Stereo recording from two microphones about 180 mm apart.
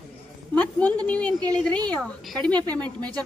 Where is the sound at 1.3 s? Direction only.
20° right (ahead or behind).